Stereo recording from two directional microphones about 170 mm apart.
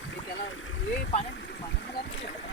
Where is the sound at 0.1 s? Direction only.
90° left.